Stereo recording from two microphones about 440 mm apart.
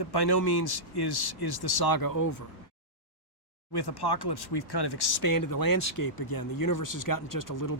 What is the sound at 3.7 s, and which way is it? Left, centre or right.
Speech, left.